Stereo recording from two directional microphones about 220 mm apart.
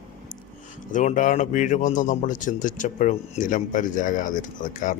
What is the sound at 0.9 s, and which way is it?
Speech, 35° left (ahead or behind).